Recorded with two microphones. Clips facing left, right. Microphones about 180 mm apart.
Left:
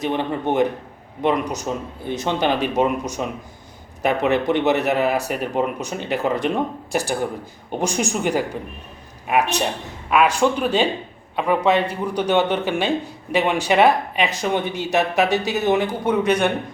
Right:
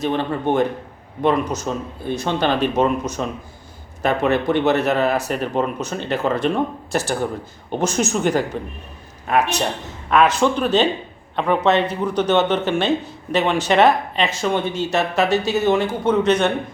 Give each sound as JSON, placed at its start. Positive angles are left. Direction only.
{"t": 0.0, "sound": "speech", "side_deg": 15}